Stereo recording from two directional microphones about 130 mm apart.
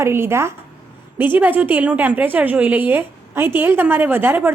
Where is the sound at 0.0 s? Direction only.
20° right (ahead or behind).